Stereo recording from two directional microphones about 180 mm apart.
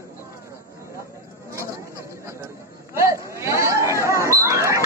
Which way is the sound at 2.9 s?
15° right (ahead or behind).